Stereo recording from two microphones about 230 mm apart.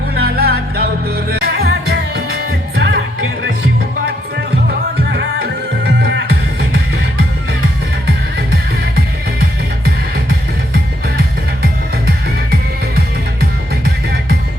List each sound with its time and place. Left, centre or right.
0.2 s music: right
5.1 s music: right
9.0 s music: right